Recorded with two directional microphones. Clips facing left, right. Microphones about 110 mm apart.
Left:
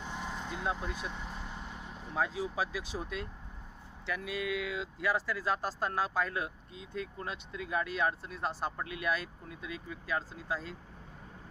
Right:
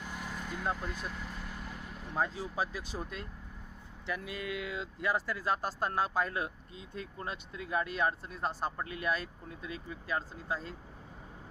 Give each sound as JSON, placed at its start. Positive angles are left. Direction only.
{"t": 0.0, "sound": "vehicle", "side_deg": -5}
{"t": 0.3, "sound": "vehicle", "side_deg": 20}
{"t": 0.5, "sound": "speech", "side_deg": 0}
{"t": 1.4, "sound": "vehicle", "side_deg": 25}
{"t": 2.0, "sound": "speech", "side_deg": 0}
{"t": 4.3, "sound": "speech", "side_deg": 0}